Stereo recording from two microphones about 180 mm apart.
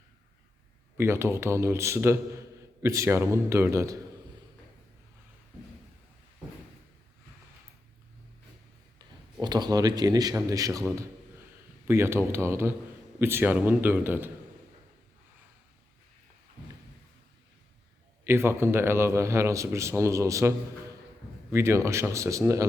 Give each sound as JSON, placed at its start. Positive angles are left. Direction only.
{"t": 0.9, "sound": "a man's voice", "side_deg": -15}
{"t": 9.4, "sound": "a man's voice", "side_deg": -20}
{"t": 18.3, "sound": "a man's voice", "side_deg": -15}
{"t": 21.5, "sound": "a man's voice", "side_deg": -15}